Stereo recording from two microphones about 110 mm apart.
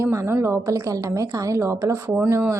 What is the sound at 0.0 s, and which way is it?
A woman's voice, 25° right (ahead or behind).